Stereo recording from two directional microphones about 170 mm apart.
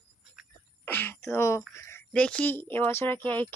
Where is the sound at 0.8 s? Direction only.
10° left (ahead or behind).